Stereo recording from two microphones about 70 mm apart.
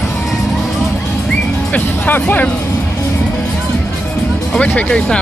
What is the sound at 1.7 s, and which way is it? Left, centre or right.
Music, left.